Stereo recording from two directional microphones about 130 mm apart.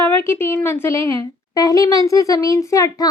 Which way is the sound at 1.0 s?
45° right (ahead or behind).